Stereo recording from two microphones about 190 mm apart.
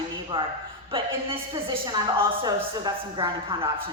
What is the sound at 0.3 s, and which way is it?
A woman's voice, 25° right (ahead or behind).